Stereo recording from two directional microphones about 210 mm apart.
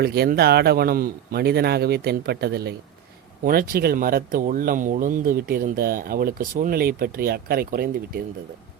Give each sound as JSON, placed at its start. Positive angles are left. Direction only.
{"t": 0.0, "sound": "speech", "side_deg": -50}